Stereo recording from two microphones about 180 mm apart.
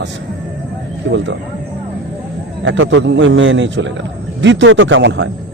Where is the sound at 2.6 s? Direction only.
90° right.